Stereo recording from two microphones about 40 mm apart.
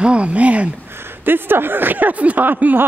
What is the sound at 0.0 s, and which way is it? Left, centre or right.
Speech, right.